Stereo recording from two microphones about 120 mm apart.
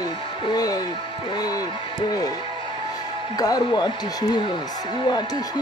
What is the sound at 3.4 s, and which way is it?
Speech, 35° left (ahead or behind).